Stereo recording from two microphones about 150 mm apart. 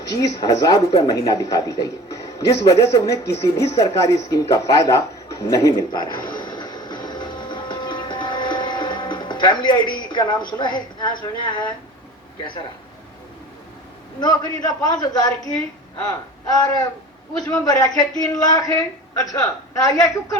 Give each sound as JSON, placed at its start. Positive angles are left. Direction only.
{"t": 0.1, "sound": "speech", "side_deg": 25}
{"t": 3.4, "sound": "a sound", "side_deg": 20}
{"t": 10.6, "sound": "speech", "side_deg": 30}
{"t": 14.2, "sound": "speech", "side_deg": 25}